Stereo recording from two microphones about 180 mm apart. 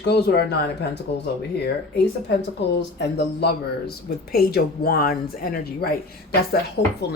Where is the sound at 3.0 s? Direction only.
70° left (ahead or behind).